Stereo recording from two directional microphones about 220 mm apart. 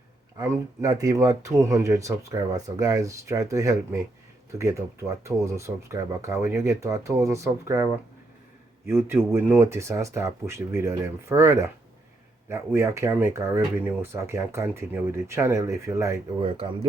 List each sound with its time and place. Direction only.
0.3 s speech: 15° right (ahead or behind)
8.9 s speech: 10° right (ahead or behind)
16.5 s speech: 25° right (ahead or behind)